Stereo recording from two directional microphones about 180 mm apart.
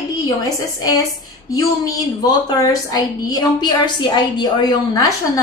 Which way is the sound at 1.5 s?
20° left (ahead or behind).